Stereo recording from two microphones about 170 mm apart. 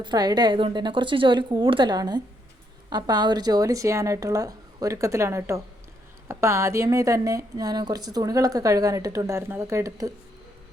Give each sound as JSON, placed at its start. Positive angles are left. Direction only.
{"t": 0.0, "sound": "a woman's voice", "side_deg": -25}